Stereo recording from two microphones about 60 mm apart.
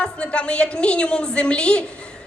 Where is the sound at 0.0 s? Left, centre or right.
Centre.